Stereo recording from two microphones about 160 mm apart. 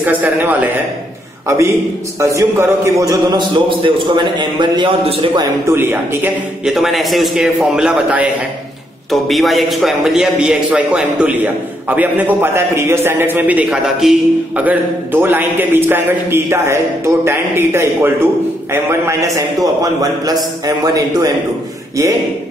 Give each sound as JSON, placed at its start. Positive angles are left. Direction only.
{"t": 0.0, "sound": "a man's voice", "side_deg": -10}
{"t": 2.1, "sound": "a man's voice", "side_deg": -20}
{"t": 5.7, "sound": "a man's voice", "side_deg": -15}
{"t": 6.7, "sound": "a man's voice", "side_deg": 0}